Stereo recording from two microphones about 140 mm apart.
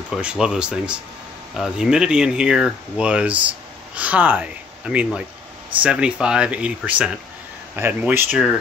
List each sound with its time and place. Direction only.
0.1 s speech: 5° right (ahead or behind)